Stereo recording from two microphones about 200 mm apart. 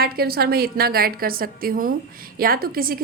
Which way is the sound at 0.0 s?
50° right (ahead or behind).